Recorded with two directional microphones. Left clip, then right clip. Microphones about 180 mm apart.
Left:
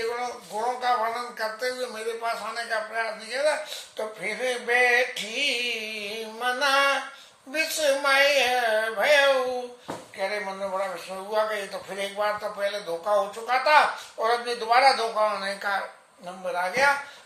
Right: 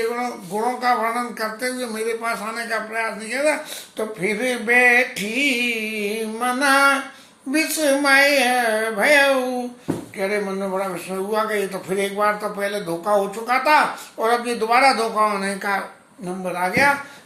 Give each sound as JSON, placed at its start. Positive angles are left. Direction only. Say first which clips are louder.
{"t": 0.1, "sound": "speech", "louder": "right 5 dB", "side_deg": -10}